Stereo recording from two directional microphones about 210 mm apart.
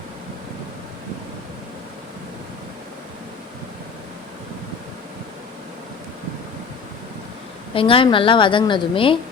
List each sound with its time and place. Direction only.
7.7 s a woman's voice: 25° left (ahead or behind)